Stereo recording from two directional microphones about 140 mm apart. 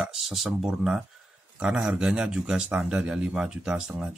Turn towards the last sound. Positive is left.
turn(degrees=-5)  # may be behind; listen again after turning